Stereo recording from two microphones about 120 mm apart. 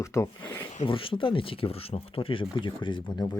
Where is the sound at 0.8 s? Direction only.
45° left (ahead or behind).